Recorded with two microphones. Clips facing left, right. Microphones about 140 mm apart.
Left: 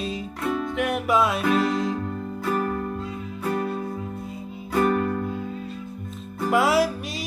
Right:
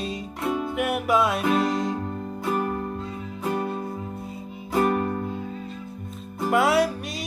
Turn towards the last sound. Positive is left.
turn(degrees=0)  # may be behind; listen again after turning